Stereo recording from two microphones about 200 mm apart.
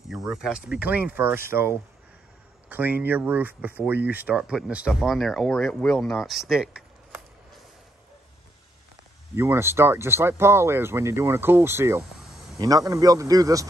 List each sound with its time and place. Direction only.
0.1 s speech: centre (ahead or behind)
2.7 s speech: 10° right (ahead or behind)
9.3 s speech: 15° right (ahead or behind)